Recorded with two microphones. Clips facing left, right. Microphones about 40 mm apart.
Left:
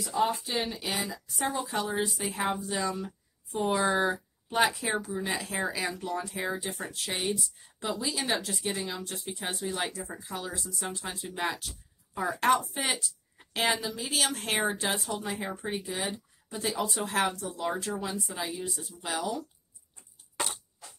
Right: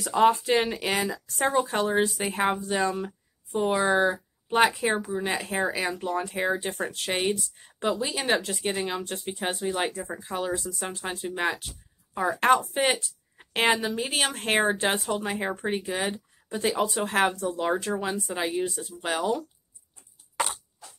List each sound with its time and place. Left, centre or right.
0.0 s speech: right
3.5 s speech: centre
4.5 s speech: right